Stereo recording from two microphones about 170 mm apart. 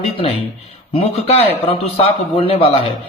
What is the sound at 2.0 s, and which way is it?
Speech, 35° left (ahead or behind).